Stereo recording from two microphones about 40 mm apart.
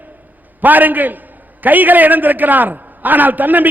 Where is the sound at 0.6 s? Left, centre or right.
Right.